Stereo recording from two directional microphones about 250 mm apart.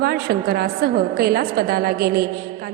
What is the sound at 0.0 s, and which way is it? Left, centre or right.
A woman's voice, right.